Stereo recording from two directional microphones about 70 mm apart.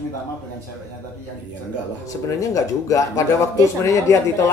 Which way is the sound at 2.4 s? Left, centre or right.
Left.